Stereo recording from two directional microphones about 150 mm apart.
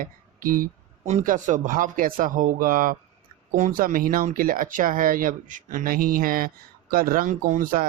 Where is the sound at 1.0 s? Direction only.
55° right (ahead or behind).